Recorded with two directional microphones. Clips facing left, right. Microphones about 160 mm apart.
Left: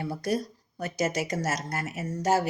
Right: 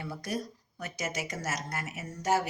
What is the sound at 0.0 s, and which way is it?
Speech, 35° left (ahead or behind).